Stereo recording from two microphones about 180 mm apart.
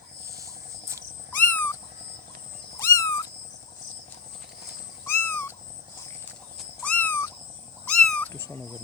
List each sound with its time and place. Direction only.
0.3 s a sound: 20° right (ahead or behind)
1.4 s owl: 10° left (ahead or behind)
2.8 s owl: 15° left (ahead or behind)
5.0 s owl: 10° left (ahead or behind)
6.6 s cat: 5° left (ahead or behind)